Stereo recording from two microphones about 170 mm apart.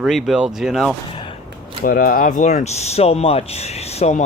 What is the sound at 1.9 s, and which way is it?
Speech, 55° left (ahead or behind).